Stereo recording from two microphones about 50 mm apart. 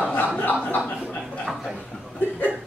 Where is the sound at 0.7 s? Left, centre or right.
Left.